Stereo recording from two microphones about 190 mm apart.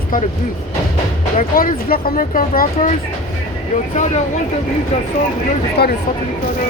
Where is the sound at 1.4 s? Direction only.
50° left (ahead or behind).